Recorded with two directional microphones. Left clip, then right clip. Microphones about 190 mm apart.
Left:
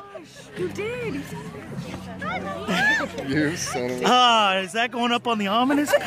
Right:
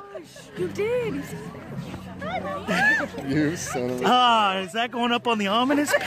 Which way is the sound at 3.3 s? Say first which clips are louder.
Left 1 dB; 40° right (ahead or behind).